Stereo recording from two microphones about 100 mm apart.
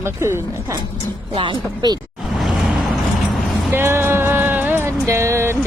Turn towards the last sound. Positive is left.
turn(degrees=-25)  # may be behind; listen again after turning